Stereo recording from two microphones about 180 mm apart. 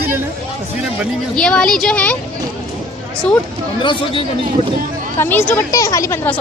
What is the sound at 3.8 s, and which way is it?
Speech, 30° left (ahead or behind).